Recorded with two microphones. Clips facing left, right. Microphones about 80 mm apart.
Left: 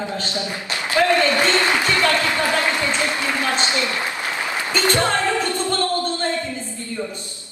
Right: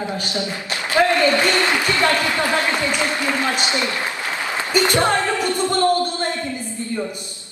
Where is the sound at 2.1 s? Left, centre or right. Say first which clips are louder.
Even; left.